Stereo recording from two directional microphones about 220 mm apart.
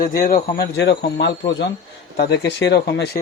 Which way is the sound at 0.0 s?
40° left (ahead or behind).